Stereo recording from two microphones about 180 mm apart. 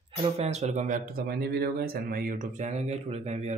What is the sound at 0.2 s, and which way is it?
Speech, 35° right (ahead or behind).